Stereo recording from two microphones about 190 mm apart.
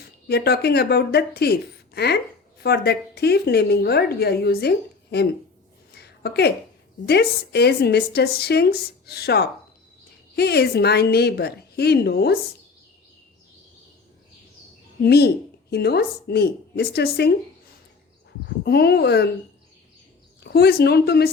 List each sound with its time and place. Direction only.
0.3 s speech: 55° left (ahead or behind)
5.9 s a sound: 60° left (ahead or behind)
7.0 s speech: 60° left (ahead or behind)
15.0 s speech: 60° left (ahead or behind)
18.4 s speech: 60° left (ahead or behind)
20.4 s speech: 55° left (ahead or behind)